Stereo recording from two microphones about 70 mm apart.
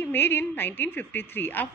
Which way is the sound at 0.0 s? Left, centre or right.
Left.